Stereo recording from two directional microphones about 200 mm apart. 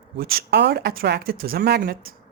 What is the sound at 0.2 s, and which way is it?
Speech, 50° right (ahead or behind).